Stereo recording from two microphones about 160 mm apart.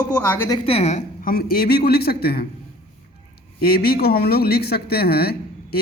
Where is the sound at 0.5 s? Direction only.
35° left (ahead or behind).